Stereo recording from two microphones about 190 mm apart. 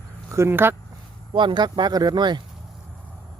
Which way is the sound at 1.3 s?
25° right (ahead or behind).